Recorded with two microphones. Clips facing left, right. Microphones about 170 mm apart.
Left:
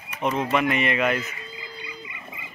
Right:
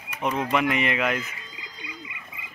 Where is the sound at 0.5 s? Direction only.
10° right (ahead or behind).